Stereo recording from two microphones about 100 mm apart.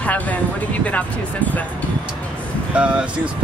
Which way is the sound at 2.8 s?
10° right (ahead or behind).